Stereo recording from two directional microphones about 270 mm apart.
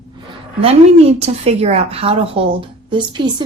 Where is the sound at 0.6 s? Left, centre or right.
Right.